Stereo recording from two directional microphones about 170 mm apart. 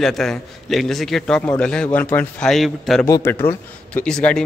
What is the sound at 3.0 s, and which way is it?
A man's voice, 15° left (ahead or behind).